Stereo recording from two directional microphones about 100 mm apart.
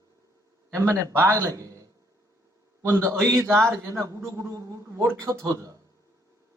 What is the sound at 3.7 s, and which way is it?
A man's voice, 30° right (ahead or behind).